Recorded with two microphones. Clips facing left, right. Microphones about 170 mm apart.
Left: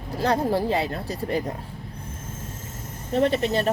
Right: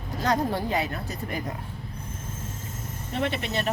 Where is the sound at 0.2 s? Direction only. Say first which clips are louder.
Left 3 dB; 30° left (ahead or behind).